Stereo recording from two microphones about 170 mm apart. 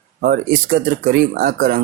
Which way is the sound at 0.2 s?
65° right (ahead or behind).